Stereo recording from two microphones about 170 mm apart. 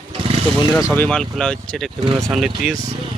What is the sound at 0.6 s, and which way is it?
Speech, 25° left (ahead or behind).